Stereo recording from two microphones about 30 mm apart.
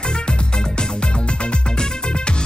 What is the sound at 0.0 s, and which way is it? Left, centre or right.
Music, left.